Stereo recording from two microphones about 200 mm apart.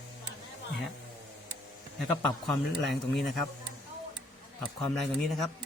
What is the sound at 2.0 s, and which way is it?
Speech, 5° left (ahead or behind).